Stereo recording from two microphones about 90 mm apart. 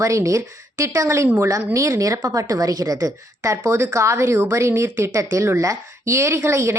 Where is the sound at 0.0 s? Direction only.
35° right (ahead or behind).